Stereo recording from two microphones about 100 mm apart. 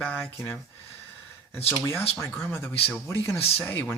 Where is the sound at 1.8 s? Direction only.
20° left (ahead or behind).